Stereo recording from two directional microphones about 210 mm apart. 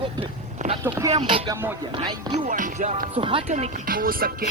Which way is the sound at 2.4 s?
40° right (ahead or behind).